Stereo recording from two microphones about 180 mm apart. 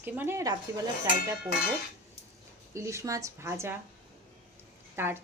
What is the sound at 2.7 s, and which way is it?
A woman's voice, 15° right (ahead or behind).